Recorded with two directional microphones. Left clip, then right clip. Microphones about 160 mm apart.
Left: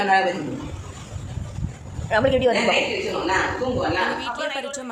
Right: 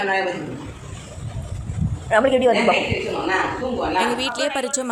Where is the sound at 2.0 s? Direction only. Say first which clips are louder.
Right 3 dB; centre (ahead or behind).